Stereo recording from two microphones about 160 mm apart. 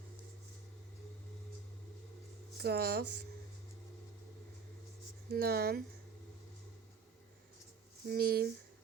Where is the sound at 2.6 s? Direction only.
80° right.